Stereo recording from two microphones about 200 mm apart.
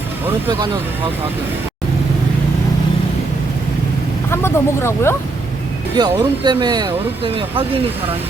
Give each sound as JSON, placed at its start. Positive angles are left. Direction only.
{"t": 4.3, "sound": "speech", "side_deg": 10}
{"t": 6.0, "sound": "speech", "side_deg": -20}